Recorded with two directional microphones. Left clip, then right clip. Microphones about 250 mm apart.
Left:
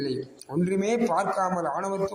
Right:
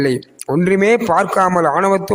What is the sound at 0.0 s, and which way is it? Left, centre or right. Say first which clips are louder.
A man's voice: right 13 dB; right.